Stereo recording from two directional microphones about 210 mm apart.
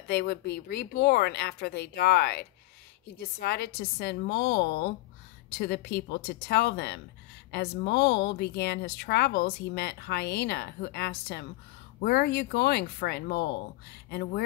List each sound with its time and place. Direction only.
0.1 s speech: 50° left (ahead or behind)